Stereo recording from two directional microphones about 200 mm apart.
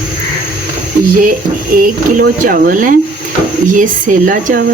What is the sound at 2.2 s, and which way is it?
Speech, 45° right (ahead or behind).